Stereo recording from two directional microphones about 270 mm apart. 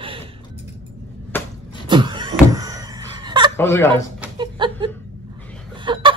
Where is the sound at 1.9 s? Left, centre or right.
Centre.